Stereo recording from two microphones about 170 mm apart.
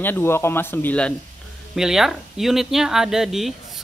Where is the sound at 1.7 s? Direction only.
Centre (ahead or behind).